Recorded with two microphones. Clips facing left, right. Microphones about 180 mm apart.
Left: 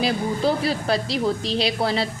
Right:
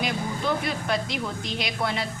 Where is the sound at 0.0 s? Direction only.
35° left (ahead or behind).